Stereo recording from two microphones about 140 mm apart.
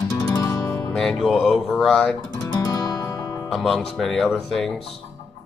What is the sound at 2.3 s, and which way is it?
Music, 25° left (ahead or behind).